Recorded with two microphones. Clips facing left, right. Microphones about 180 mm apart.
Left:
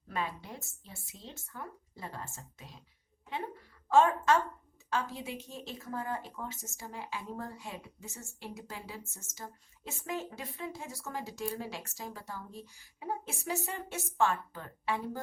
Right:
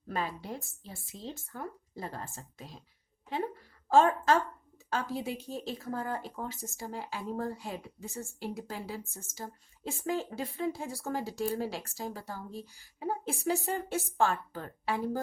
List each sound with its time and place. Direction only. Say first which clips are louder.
0.1 s a woman's voice: right 3 dB; 35° right (ahead or behind)
3.8 s a woman's voice: right 1 dB; 35° right (ahead or behind)